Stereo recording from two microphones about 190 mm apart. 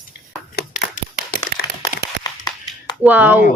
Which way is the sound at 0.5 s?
55° left (ahead or behind).